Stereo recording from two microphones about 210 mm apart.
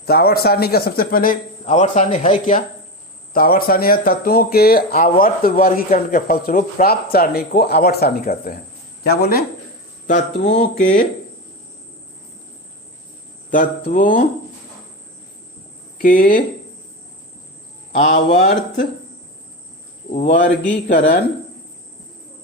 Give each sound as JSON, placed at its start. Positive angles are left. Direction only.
{"t": 0.0, "sound": "speech", "side_deg": 45}
{"t": 10.6, "sound": "speech", "side_deg": 40}
{"t": 13.5, "sound": "speech", "side_deg": 40}
{"t": 16.0, "sound": "speech", "side_deg": 40}
{"t": 17.9, "sound": "speech", "side_deg": 35}
{"t": 20.1, "sound": "speech", "side_deg": 35}